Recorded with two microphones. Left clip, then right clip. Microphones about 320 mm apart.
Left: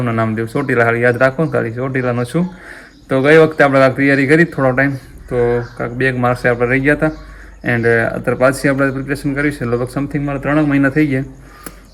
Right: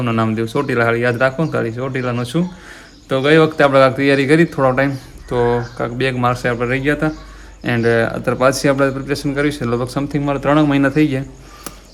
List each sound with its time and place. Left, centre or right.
0.0 s speech: centre